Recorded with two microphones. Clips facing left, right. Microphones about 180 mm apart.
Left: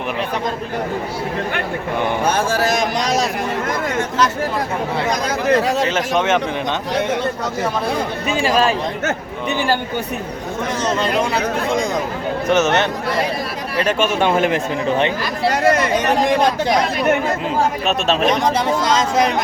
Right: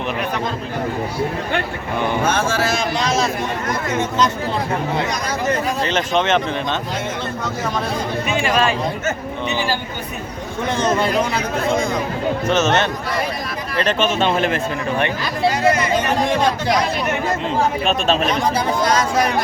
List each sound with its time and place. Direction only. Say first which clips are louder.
2.5 s speech: left 2 dB; 40° left (ahead or behind)
5.5 s speech: left 5 dB; 75° left (ahead or behind)
5.8 s speech: left 1 dB; 10° left (ahead or behind)
8.3 s speech: left 2 dB; 35° left (ahead or behind)
12.5 s speech: left 2 dB; 15° left (ahead or behind)
17.8 s speech: left 1 dB; centre (ahead or behind)
18.4 s speech: left 1 dB; 20° left (ahead or behind)